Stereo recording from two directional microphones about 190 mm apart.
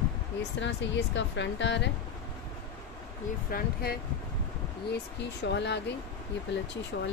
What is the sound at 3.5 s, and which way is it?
Speech, 55° left (ahead or behind).